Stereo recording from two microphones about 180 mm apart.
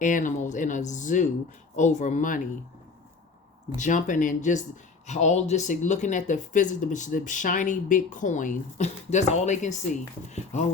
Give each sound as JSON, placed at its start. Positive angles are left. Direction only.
{"t": 0.0, "sound": "speech", "side_deg": 45}
{"t": 3.7, "sound": "speech", "side_deg": 45}